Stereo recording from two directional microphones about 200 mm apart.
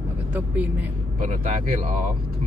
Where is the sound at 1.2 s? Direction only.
40° right (ahead or behind).